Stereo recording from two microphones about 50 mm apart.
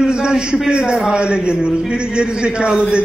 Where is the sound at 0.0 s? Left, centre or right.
Centre.